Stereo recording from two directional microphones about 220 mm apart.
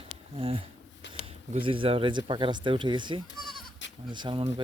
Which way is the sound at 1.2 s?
25° right (ahead or behind).